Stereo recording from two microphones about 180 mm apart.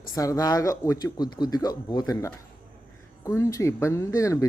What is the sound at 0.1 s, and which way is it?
Speech, 20° left (ahead or behind).